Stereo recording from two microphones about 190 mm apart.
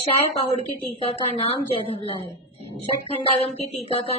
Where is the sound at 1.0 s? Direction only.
30° left (ahead or behind).